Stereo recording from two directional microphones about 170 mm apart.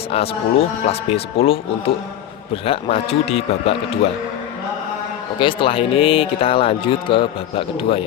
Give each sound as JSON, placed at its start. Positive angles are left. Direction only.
{"t": 0.1, "sound": "speech", "side_deg": 35}
{"t": 5.4, "sound": "speech", "side_deg": 30}